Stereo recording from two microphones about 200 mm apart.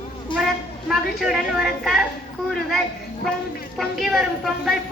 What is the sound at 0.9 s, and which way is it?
Speech, centre (ahead or behind).